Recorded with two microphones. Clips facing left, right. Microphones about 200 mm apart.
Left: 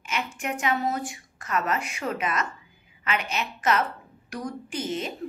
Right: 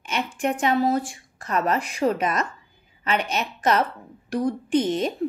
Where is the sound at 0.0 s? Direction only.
30° right (ahead or behind).